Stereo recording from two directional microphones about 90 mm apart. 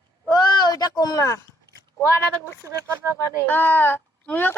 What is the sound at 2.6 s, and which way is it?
Speech, 30° right (ahead or behind).